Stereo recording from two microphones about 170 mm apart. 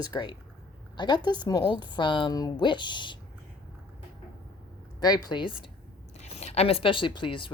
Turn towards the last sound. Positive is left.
turn(degrees=30)  # may be behind; listen again after turning